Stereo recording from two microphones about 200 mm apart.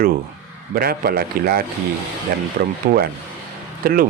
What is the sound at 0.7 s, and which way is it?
Speech, 50° right (ahead or behind).